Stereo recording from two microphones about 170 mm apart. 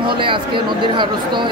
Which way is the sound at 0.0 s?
30° right (ahead or behind).